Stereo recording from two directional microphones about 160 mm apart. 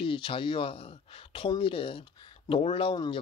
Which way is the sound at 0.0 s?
30° left (ahead or behind).